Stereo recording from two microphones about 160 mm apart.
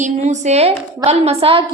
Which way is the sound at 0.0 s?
45° right (ahead or behind).